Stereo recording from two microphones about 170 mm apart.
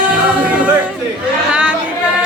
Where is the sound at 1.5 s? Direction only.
5° right (ahead or behind).